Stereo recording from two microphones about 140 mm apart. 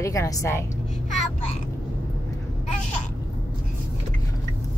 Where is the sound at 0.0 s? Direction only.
20° left (ahead or behind).